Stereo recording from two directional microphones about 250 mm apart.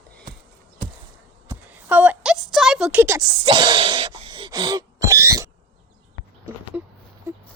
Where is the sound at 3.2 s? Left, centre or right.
Centre.